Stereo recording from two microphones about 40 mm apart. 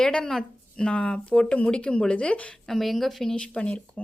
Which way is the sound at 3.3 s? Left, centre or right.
Left.